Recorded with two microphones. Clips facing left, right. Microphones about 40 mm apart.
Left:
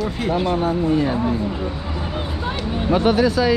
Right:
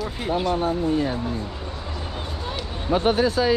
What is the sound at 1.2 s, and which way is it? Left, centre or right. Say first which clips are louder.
Speech: left 7 dB; left.